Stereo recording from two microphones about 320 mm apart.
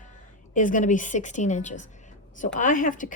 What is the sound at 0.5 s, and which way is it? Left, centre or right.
Speech, left.